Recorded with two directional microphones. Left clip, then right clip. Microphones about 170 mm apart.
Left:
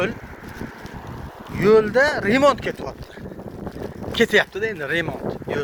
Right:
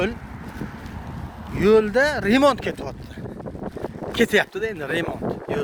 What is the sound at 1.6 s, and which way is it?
Speech, 35° right (ahead or behind).